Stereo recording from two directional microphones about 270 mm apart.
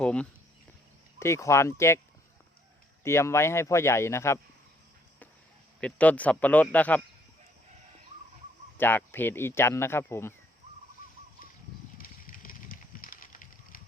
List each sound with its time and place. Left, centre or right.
0.0 s a sound: centre
1.2 s speech: centre
3.0 s speech: centre
5.8 s speech: centre
8.8 s speech: centre
11.9 s a sound: left